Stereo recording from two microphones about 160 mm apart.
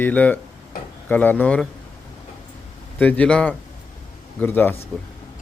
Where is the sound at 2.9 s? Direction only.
10° left (ahead or behind).